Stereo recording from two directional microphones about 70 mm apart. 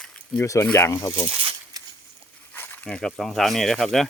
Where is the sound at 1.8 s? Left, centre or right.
Right.